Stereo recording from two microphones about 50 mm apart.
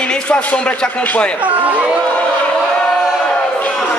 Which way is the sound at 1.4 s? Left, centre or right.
Right.